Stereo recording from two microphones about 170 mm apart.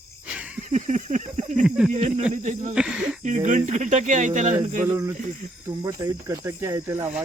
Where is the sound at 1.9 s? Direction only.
40° right (ahead or behind).